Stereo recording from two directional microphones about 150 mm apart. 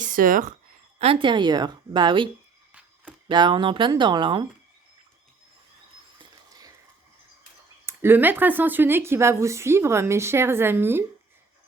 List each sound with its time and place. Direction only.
0.0 s speech: 65° right (ahead or behind)
0.9 s a woman's voice: 40° right (ahead or behind)
2.7 s a sound: 10° right (ahead or behind)
3.2 s a woman's voice: 30° right (ahead or behind)
6.1 s a sound: 25° right (ahead or behind)
7.9 s speech: 15° right (ahead or behind)